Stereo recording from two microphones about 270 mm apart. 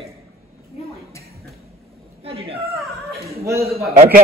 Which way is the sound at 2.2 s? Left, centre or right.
Right.